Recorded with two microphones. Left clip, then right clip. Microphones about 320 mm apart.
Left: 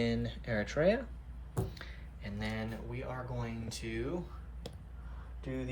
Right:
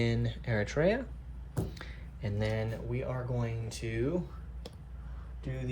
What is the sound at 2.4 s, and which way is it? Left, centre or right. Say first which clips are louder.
Speech: right 5 dB; centre.